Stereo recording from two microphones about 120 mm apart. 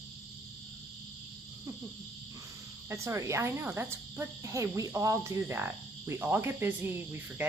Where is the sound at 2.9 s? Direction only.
25° right (ahead or behind).